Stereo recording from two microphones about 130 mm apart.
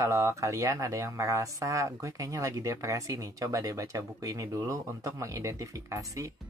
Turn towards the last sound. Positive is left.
turn(degrees=-25)  # may be behind; listen again after turning